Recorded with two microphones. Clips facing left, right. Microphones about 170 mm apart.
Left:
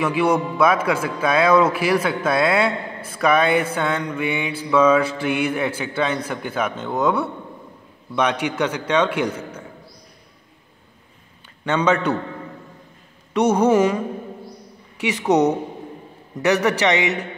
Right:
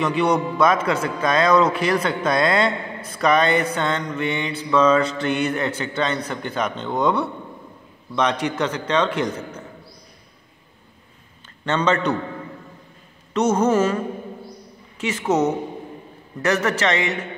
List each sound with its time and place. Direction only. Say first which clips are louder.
0.0 s mantra: left 1 dB; 10° left (ahead or behind)
11.6 s mantra: left 1 dB; 10° left (ahead or behind)
13.3 s mantra: left 2 dB; 15° left (ahead or behind)